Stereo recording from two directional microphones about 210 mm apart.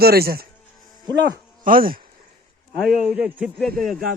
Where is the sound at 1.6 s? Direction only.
40° right (ahead or behind).